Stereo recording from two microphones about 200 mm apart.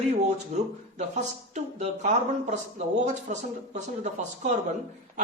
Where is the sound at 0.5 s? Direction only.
35° right (ahead or behind).